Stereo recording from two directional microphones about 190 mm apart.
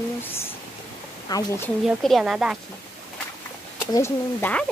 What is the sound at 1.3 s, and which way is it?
Speech, 20° left (ahead or behind).